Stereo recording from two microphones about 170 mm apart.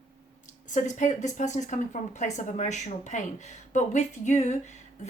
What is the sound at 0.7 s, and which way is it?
A woman's voice, 45° left (ahead or behind).